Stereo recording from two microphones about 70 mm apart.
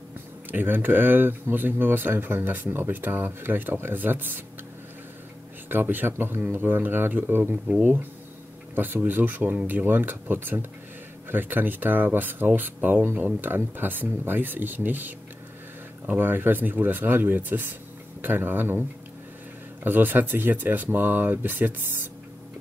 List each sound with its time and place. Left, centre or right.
0.5 s speech: right
5.7 s speech: right